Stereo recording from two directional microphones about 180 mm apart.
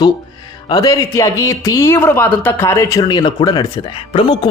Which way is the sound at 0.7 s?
20° left (ahead or behind).